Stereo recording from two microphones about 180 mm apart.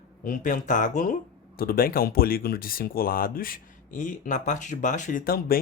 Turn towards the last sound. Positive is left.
turn(degrees=55)  # may be behind; listen again after turning